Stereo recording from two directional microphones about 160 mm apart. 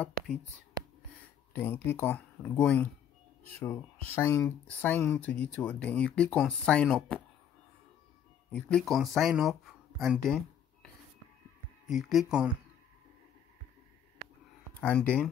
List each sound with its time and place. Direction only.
1.5 s speech: 15° left (ahead or behind)
8.5 s speech: 5° left (ahead or behind)
11.9 s speech: centre (ahead or behind)
14.8 s speech: 10° left (ahead or behind)